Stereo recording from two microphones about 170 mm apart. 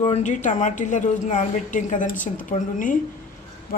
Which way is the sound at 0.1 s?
45° left (ahead or behind).